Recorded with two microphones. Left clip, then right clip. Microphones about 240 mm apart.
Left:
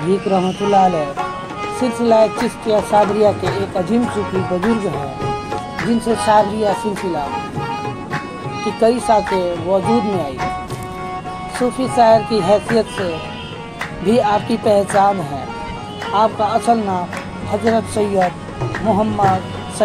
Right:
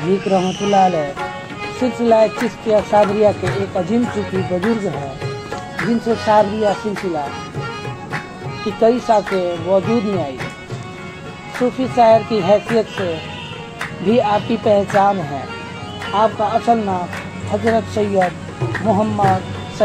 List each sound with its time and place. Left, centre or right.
0.3 s speech: left
8.7 s speech: left
11.8 s speech: left
14.0 s speech: left